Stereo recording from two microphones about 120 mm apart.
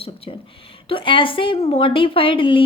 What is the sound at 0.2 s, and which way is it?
A woman's voice, 50° left (ahead or behind).